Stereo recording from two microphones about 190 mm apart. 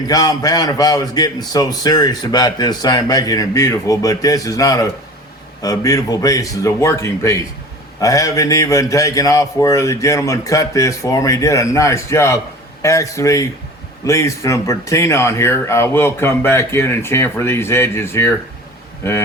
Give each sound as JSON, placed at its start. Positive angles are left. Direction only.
{"t": 0.1, "sound": "a man's voice", "side_deg": 20}